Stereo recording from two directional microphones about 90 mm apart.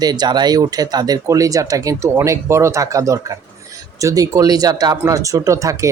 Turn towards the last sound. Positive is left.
turn(degrees=-35)  # may be behind; listen again after turning